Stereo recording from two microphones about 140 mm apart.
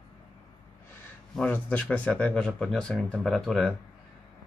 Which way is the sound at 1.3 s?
10° left (ahead or behind).